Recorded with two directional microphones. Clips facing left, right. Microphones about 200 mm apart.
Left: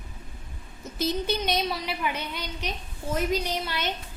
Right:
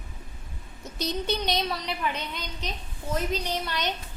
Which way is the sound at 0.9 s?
Centre (ahead or behind).